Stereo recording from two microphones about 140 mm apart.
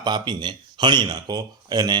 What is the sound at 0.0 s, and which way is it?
Speech, 30° right (ahead or behind).